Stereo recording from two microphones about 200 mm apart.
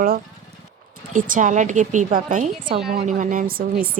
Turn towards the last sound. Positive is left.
turn(degrees=-45)  # may be behind; listen again after turning